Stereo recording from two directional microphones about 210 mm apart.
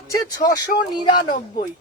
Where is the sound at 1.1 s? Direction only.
40° left (ahead or behind).